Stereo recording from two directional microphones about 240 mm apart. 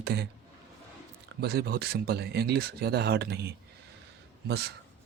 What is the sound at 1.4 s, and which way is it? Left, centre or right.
Speech, right.